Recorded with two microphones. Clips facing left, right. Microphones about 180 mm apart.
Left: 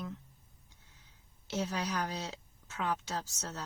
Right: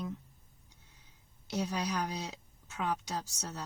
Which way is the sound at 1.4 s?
15° right (ahead or behind).